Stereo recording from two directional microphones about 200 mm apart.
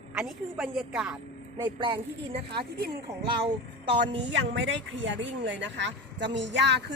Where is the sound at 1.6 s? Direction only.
25° right (ahead or behind).